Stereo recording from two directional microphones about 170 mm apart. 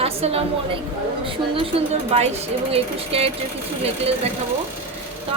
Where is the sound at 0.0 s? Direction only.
35° right (ahead or behind).